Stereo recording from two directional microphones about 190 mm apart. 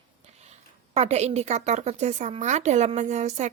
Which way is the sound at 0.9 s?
35° right (ahead or behind).